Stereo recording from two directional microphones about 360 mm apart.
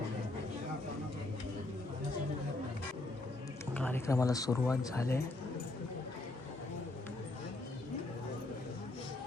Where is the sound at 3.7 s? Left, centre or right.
Centre.